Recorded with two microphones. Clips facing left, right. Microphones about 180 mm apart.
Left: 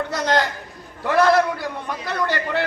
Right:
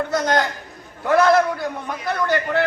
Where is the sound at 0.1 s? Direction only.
50° right (ahead or behind).